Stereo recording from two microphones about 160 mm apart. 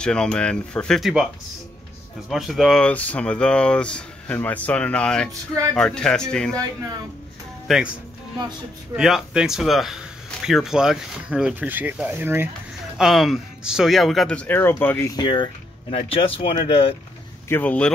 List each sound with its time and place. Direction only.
0.0 s speech: 5° left (ahead or behind)
2.2 s speech: centre (ahead or behind)
7.6 s speech: centre (ahead or behind)
8.9 s speech: 5° right (ahead or behind)
12.9 s speech: centre (ahead or behind); by 16.9 s 35° left (ahead or behind)
17.5 s speech: 10° left (ahead or behind)